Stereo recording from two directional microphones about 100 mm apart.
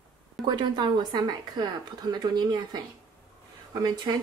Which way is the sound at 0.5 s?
50° right (ahead or behind).